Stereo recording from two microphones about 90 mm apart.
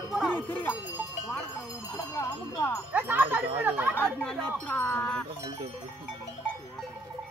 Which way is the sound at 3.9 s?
15° left (ahead or behind).